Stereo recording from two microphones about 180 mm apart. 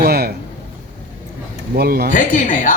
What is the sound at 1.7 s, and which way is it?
Speech, 60° right (ahead or behind).